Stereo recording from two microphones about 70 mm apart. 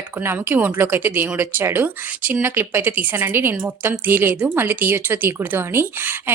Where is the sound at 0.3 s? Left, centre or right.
Right.